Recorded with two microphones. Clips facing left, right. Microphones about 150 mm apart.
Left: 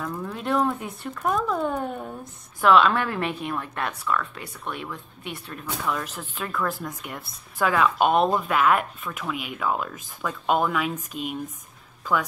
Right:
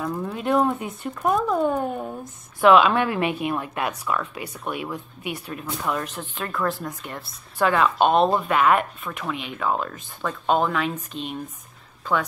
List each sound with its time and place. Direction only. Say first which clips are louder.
0.0 s speech: right 4 dB; 20° right (ahead or behind)
0.3 s a woman's voice: right 3 dB; 5° right (ahead or behind)